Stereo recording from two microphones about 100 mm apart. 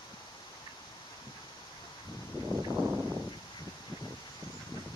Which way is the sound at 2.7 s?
15° right (ahead or behind).